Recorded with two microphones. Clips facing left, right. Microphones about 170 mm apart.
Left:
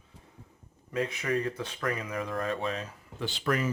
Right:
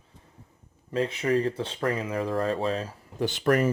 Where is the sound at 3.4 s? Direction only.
50° right (ahead or behind).